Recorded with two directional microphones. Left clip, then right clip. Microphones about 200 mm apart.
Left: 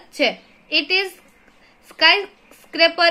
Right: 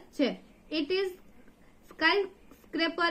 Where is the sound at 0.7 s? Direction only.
30° right (ahead or behind).